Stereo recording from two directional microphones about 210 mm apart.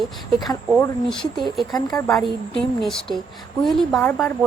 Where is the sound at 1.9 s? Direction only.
15° left (ahead or behind).